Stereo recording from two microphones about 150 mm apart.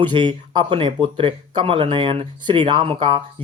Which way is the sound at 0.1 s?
30° right (ahead or behind).